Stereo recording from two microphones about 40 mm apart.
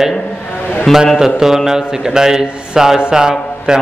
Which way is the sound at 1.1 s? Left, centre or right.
Centre.